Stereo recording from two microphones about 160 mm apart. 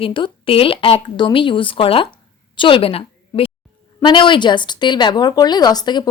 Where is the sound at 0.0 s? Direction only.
35° left (ahead or behind).